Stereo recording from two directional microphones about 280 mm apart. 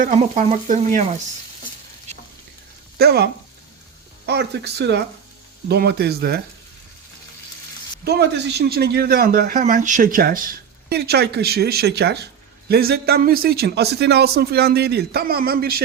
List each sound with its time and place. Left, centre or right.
0.0 s frying: right
3.0 s speech: right
4.3 s speech: right
8.0 s speech: right